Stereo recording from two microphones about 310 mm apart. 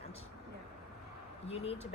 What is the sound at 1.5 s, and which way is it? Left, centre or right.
Speech, centre.